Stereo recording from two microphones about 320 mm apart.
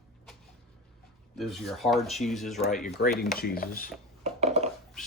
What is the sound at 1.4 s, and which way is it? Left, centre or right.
Speech, centre.